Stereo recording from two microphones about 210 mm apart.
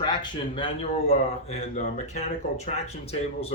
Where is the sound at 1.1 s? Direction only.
35° left (ahead or behind).